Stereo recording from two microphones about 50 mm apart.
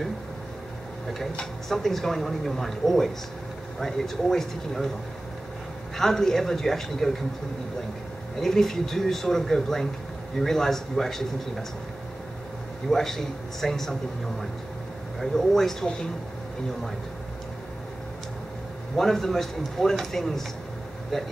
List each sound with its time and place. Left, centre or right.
1.7 s speech: centre
5.9 s speech: centre
8.4 s speech: centre
12.9 s speech: centre
15.1 s speech: centre
18.9 s speech: centre